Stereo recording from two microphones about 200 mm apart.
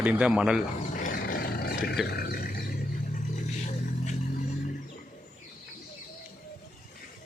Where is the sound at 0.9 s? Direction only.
40° left (ahead or behind).